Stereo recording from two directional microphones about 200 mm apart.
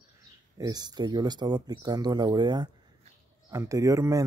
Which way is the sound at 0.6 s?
20° right (ahead or behind).